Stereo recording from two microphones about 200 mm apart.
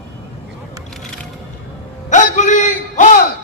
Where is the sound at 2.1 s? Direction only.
35° left (ahead or behind).